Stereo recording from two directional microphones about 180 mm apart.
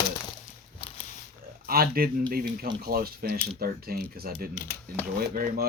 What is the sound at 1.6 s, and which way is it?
Speech, 55° right (ahead or behind).